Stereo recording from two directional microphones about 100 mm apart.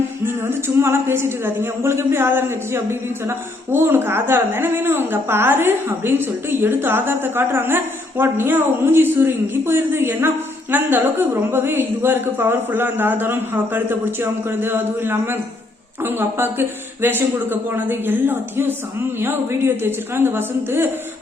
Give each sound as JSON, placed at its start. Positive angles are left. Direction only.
{"t": 0.4, "sound": "a man's voice", "side_deg": -25}